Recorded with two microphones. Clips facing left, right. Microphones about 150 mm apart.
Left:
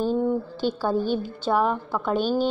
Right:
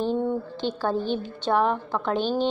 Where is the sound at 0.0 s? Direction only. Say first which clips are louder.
Left 2 dB; 5° left (ahead or behind).